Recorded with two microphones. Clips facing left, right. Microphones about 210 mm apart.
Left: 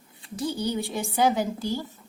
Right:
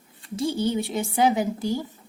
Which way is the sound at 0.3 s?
25° right (ahead or behind).